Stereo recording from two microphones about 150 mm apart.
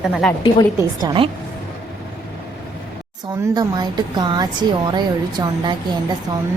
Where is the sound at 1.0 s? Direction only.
35° right (ahead or behind).